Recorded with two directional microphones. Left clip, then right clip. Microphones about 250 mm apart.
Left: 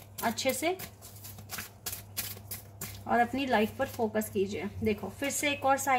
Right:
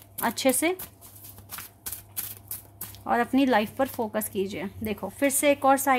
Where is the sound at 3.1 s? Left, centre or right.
Right.